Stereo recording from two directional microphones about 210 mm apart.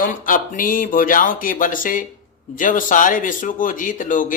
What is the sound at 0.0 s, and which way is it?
Mantra, 40° left (ahead or behind).